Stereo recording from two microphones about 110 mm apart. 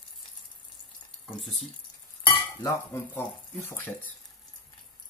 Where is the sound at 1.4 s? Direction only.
Centre (ahead or behind).